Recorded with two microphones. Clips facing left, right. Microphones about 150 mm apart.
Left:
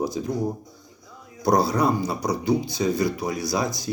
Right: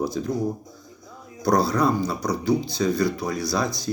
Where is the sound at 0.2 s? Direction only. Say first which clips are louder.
Right 1 dB; 15° left (ahead or behind).